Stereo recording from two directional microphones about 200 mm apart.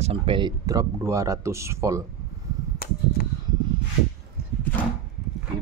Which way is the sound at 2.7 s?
50° left (ahead or behind).